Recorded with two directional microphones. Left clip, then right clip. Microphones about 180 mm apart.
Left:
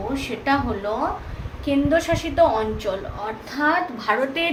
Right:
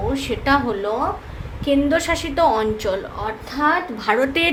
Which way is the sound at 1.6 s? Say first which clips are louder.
Right 2 dB; 45° right (ahead or behind).